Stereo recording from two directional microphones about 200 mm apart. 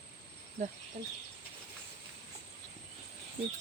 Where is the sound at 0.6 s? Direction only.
35° right (ahead or behind).